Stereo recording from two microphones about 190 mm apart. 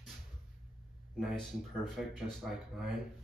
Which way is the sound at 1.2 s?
Centre (ahead or behind).